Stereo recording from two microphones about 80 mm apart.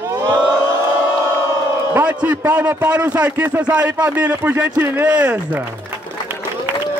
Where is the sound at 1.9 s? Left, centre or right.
Right.